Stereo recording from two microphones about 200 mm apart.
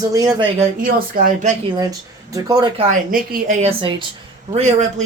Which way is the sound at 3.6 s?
25° right (ahead or behind).